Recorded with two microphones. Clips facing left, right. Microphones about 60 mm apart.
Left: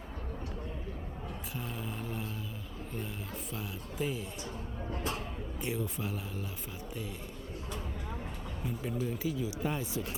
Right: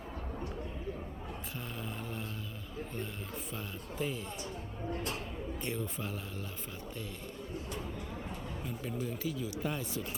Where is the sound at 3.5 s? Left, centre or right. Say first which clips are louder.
Left 1 dB; centre.